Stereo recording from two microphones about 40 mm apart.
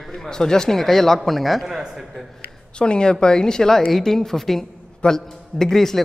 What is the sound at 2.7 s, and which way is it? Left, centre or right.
A woman's voice, left.